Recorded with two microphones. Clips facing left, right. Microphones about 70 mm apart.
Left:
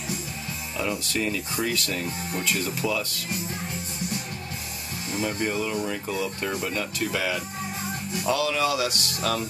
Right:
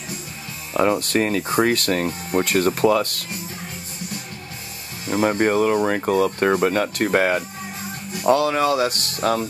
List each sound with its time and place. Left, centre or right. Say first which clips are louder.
0.7 s speech: right 10 dB; right
5.1 s speech: right 9 dB; right